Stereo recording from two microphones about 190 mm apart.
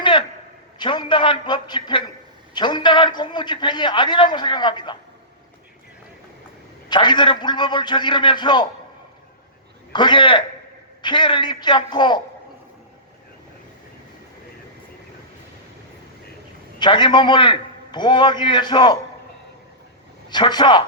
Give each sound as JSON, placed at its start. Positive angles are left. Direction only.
{"t": 0.0, "sound": "a sound", "side_deg": 25}
{"t": 0.8, "sound": "a man's voice", "side_deg": 25}
{"t": 6.8, "sound": "a man's voice", "side_deg": 25}
{"t": 9.9, "sound": "a man's voice", "side_deg": 25}
{"t": 16.8, "sound": "a man's voice", "side_deg": 25}
{"t": 20.3, "sound": "a man's voice", "side_deg": 25}